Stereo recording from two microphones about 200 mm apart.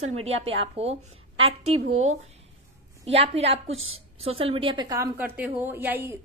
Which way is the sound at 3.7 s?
90° right.